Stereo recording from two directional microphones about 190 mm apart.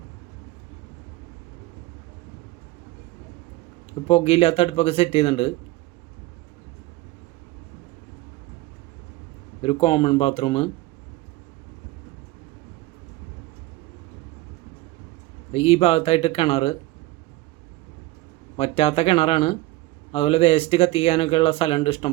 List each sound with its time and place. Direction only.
4.1 s speech: 30° left (ahead or behind)
9.6 s speech: 25° left (ahead or behind)
15.5 s speech: 30° left (ahead or behind)
18.5 s speech: 30° left (ahead or behind)